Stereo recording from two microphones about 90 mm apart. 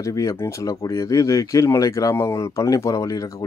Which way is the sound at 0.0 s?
40° left (ahead or behind).